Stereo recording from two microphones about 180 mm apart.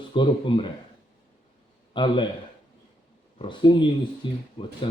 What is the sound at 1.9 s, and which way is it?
Speech, 25° left (ahead or behind).